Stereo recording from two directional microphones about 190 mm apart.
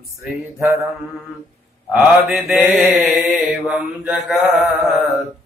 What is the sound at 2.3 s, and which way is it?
Mantra, centre (ahead or behind).